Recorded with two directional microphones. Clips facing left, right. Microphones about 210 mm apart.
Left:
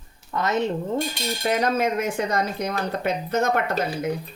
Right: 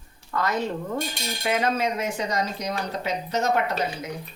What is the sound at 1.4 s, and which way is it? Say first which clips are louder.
Speech: left 2 dB; 45° left (ahead or behind).